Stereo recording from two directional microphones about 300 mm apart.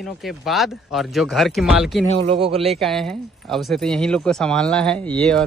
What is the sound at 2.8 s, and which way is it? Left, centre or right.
Speech, centre.